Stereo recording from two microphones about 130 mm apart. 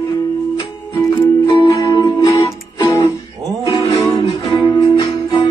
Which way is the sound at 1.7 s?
35° left (ahead or behind).